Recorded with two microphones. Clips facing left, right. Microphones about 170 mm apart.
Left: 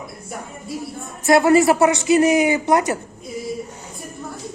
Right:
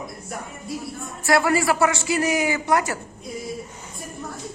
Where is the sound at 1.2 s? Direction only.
20° left (ahead or behind).